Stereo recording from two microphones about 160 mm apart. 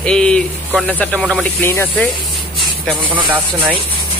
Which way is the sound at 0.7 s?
10° left (ahead or behind).